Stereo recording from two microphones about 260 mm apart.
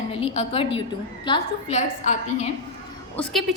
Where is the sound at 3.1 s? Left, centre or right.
Centre.